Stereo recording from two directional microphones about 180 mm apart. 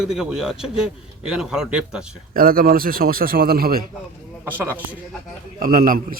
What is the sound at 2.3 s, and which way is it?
Speech, 55° right (ahead or behind).